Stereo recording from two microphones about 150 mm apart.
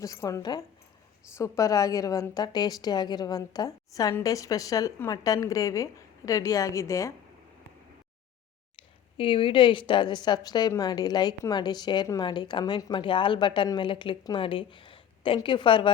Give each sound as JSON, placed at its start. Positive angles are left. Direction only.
{"t": 0.0, "sound": "a woman's voice", "side_deg": 20}
{"t": 8.7, "sound": "a woman's voice", "side_deg": 35}